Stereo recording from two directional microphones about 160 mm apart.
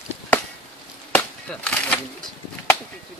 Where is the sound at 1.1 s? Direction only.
5° left (ahead or behind).